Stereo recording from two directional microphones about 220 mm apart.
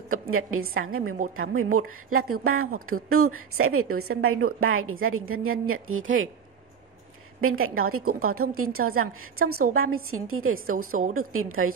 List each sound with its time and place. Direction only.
0.1 s a woman's voice: 70° right (ahead or behind)
7.3 s a woman's voice: 70° right (ahead or behind)